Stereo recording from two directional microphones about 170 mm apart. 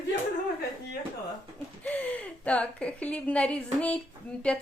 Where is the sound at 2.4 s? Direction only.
5° left (ahead or behind).